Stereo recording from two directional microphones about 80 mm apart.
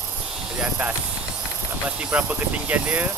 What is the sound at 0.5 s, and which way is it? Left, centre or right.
Speech, centre.